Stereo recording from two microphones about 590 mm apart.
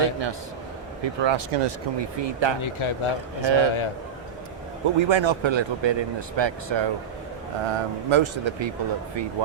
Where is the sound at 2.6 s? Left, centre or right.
Left.